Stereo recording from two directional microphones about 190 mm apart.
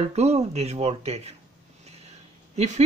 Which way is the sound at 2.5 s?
35° right (ahead or behind).